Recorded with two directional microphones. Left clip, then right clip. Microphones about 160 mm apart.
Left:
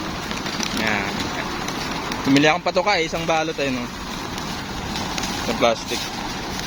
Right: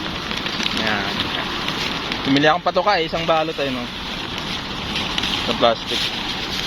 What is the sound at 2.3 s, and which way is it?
Speech, 15° left (ahead or behind).